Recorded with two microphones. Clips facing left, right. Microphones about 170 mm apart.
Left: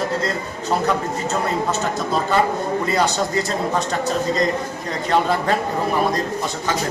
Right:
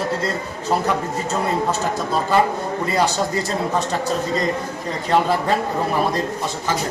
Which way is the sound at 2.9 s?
10° right (ahead or behind).